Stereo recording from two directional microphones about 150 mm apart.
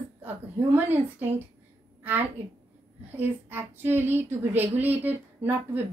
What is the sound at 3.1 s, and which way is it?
A woman's voice, 15° right (ahead or behind).